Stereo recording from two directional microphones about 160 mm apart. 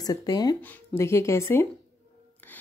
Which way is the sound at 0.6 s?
10° left (ahead or behind).